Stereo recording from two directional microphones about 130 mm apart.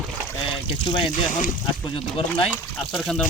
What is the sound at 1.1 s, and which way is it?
Speech, 90° left.